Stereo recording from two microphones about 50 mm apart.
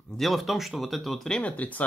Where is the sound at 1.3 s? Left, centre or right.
Left.